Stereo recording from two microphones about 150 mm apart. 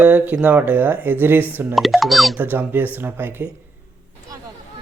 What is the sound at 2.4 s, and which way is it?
Speech, 15° right (ahead or behind).